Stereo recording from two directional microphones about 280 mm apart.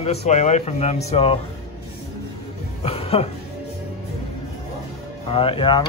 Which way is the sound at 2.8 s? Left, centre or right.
Left.